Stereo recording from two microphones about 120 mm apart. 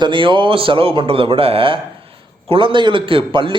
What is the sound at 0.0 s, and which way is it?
A man's voice, 45° right (ahead or behind).